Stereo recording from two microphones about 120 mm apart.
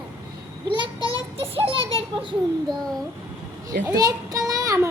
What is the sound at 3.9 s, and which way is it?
Child singing, 30° right (ahead or behind).